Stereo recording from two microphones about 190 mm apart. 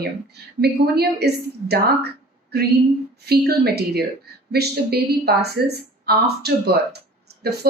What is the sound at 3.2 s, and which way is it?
A woman's voice, 55° right (ahead or behind).